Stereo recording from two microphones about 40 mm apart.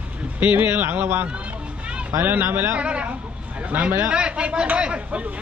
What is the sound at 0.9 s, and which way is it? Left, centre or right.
Speech, right.